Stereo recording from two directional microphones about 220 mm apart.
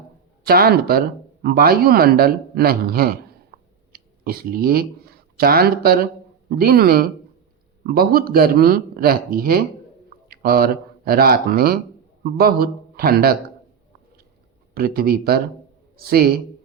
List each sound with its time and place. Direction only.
0.4 s speech: 45° right (ahead or behind)
3.5 s a sound: 45° right (ahead or behind)
3.9 s a man's voice: 45° right (ahead or behind)
14.8 s speech: 45° right (ahead or behind)